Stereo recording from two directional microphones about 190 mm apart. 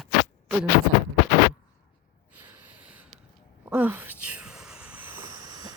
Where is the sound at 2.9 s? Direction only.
10° right (ahead or behind).